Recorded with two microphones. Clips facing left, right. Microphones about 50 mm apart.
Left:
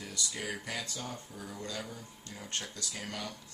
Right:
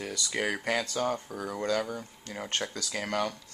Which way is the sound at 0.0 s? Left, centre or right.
Right.